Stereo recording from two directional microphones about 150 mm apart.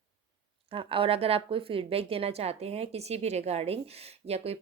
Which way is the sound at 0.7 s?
35° right (ahead or behind).